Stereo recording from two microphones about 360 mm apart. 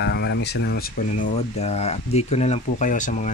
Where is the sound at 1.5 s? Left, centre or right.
Centre.